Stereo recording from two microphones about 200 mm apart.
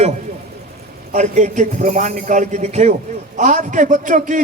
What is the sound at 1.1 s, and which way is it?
A man's voice, 35° right (ahead or behind).